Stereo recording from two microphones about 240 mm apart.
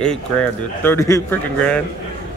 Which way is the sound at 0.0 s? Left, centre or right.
Centre.